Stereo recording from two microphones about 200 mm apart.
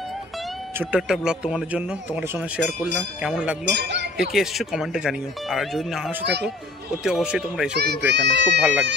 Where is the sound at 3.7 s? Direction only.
60° right (ahead or behind).